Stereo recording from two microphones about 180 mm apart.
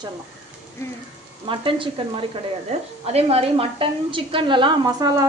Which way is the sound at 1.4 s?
30° right (ahead or behind).